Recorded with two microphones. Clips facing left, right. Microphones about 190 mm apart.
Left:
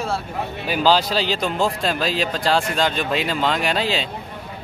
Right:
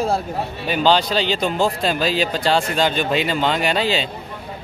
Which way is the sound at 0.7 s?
5° left (ahead or behind).